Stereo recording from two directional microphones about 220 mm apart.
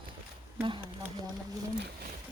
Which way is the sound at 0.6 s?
20° right (ahead or behind).